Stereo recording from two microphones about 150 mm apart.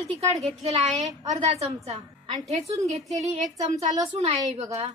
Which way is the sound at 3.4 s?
25° right (ahead or behind).